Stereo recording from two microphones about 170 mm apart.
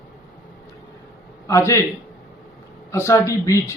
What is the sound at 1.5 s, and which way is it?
Speech, 15° left (ahead or behind).